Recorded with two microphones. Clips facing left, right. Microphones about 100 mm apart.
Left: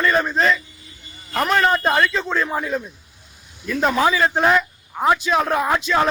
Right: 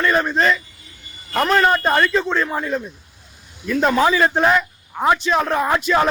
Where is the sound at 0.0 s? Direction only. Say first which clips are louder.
Right 1 dB; centre (ahead or behind).